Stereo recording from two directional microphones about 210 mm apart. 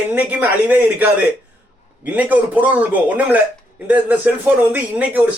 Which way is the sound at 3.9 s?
10° right (ahead or behind).